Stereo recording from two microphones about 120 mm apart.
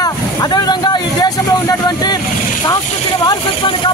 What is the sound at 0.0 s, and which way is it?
Vehicle, 35° left (ahead or behind).